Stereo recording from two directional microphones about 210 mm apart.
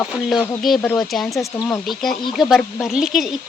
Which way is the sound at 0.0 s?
Centre (ahead or behind).